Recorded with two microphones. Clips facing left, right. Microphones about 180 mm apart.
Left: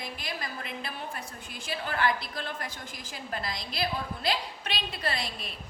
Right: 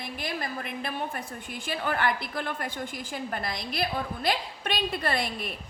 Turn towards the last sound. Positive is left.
turn(degrees=-55)  # may be behind; listen again after turning